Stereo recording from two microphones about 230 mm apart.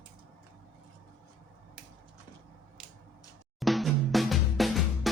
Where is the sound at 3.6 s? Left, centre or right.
Centre.